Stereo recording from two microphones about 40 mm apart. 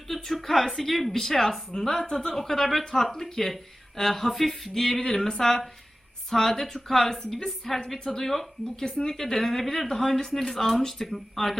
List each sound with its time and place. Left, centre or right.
0.1 s a woman's voice: centre
8.8 s speech: centre
9.1 s speech: centre